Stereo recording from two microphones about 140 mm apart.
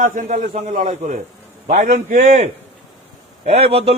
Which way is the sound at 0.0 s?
70° right (ahead or behind).